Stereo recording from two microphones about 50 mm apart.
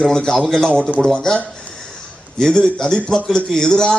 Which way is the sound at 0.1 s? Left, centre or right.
Centre.